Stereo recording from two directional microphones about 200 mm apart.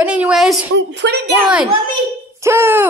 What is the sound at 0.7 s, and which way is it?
Speech, 65° right (ahead or behind).